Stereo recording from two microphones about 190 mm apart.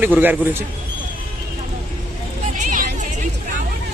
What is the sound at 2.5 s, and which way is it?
Vehicle, 45° right (ahead or behind).